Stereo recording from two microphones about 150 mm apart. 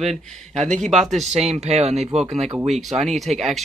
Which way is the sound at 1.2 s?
45° right (ahead or behind).